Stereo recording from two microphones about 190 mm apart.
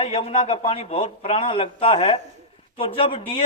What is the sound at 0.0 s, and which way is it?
A man's voice, 30° left (ahead or behind).